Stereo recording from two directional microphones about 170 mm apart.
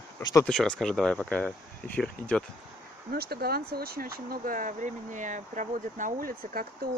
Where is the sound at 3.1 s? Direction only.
65° right (ahead or behind).